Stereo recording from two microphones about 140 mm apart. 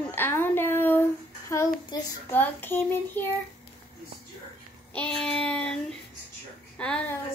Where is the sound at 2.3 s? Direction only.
15° left (ahead or behind).